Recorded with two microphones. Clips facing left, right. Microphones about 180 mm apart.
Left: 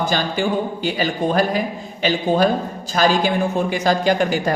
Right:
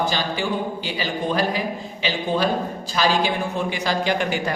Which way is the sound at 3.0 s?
45° left (ahead or behind).